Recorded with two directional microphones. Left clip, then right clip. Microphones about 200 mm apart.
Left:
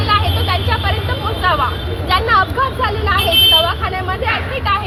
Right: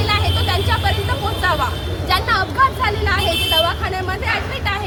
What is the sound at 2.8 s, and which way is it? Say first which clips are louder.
Speech: left 2 dB; 10° right (ahead or behind).